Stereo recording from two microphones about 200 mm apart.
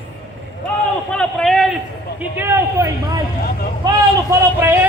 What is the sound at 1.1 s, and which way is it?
A man's voice, 5° left (ahead or behind).